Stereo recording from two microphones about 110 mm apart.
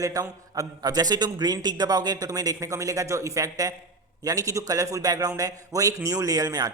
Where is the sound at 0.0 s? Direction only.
30° right (ahead or behind).